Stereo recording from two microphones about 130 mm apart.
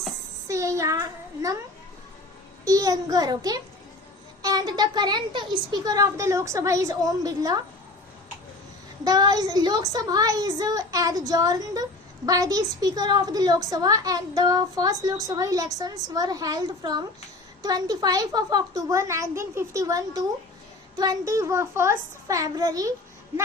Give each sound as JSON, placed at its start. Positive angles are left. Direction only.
{"t": 0.4, "sound": "a woman's voice", "side_deg": -25}
{"t": 2.6, "sound": "a woman's voice", "side_deg": -30}
{"t": 9.0, "sound": "a woman's voice", "side_deg": -30}